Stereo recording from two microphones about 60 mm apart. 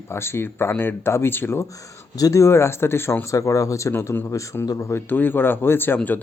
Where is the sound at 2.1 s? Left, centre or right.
Left.